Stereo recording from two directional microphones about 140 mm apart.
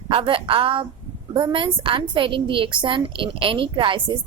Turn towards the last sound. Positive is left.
turn(degrees=-35)  # may be behind; listen again after turning